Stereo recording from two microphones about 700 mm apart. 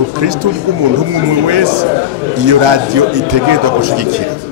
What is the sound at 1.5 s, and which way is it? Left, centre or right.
A man's voice, right.